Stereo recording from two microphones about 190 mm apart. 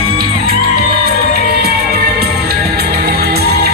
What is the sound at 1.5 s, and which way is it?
Music, 55° right (ahead or behind).